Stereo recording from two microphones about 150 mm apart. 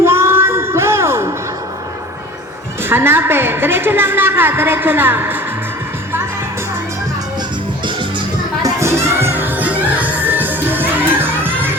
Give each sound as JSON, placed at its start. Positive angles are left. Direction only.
{"t": 0.0, "sound": "child singing", "side_deg": -15}
{"t": 2.9, "sound": "a woman's voice", "side_deg": -15}
{"t": 8.6, "sound": "music", "side_deg": -20}